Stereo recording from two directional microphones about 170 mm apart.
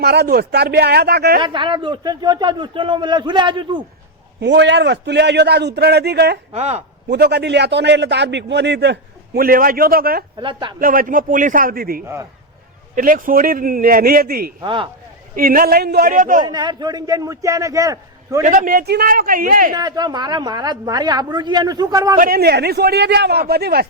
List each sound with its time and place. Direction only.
0.0 s a man's voice: 75° right (ahead or behind)
1.4 s a woman's voice: 30° right (ahead or behind)
4.4 s a man's voice: 90° right
6.5 s speech: 40° right (ahead or behind)
7.1 s a man's voice: 80° right; by 10.2 s 60° right (ahead or behind)
10.4 s a woman's voice: 30° right (ahead or behind)
10.8 s a man's voice: 55° right (ahead or behind)
14.6 s a woman's voice: 30° right (ahead or behind)
15.4 s a man's voice: 60° right (ahead or behind)
16.4 s a woman's voice: 25° right (ahead or behind)
18.4 s a man's voice: 50° right (ahead or behind)
19.7 s a woman's voice: 25° right (ahead or behind)
22.2 s a man's voice: 65° right (ahead or behind)